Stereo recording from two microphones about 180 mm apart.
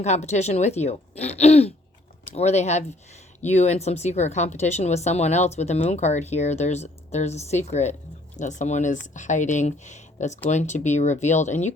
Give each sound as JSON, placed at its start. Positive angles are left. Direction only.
{"t": 0.0, "sound": "speech", "side_deg": 40}